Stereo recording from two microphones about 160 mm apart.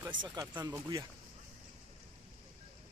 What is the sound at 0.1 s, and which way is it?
Speech, 30° right (ahead or behind).